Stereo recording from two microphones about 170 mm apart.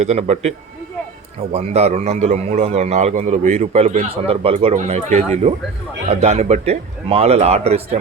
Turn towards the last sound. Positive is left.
turn(degrees=-35)  # may be behind; listen again after turning